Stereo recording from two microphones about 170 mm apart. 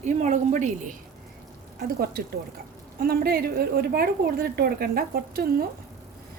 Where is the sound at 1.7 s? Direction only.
60° right (ahead or behind).